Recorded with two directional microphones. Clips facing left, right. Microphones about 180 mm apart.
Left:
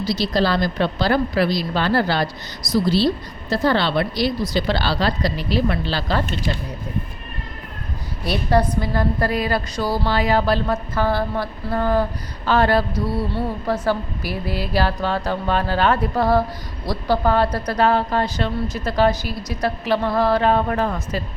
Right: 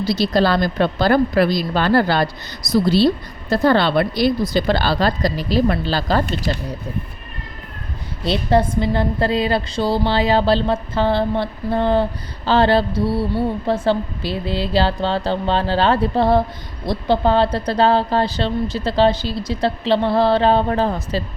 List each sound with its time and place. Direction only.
0.0 s speech: 55° right (ahead or behind)
3.5 s speech: 50° right (ahead or behind)
8.2 s a woman's voice: 25° right (ahead or behind)